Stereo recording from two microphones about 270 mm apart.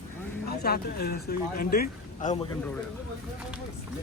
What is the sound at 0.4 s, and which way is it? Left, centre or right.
Speech, left.